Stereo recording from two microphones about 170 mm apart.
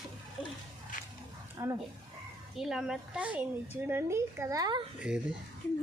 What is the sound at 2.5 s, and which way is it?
Speech, centre (ahead or behind).